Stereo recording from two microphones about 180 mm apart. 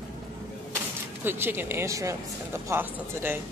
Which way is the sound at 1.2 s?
10° right (ahead or behind).